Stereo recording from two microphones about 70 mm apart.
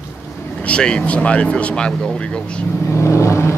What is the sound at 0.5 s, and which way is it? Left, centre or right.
Speech, centre.